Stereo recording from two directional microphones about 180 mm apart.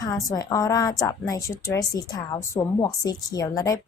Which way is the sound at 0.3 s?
20° left (ahead or behind).